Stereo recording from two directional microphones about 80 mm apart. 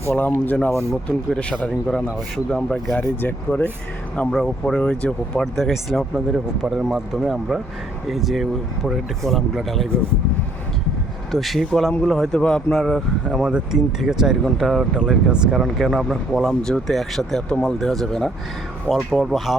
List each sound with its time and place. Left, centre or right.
0.1 s speech: left; by 2.9 s centre
2.9 s speech: left
4.3 s speech: centre
11.3 s speech: centre
13.5 s speech: centre
15.3 s speech: centre
15.6 s speech: centre